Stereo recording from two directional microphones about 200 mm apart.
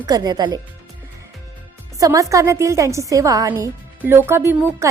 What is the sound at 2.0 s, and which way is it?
A woman's voice, 15° right (ahead or behind).